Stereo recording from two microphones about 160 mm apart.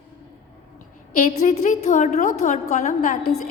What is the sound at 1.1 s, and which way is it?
A woman's voice, 50° left (ahead or behind).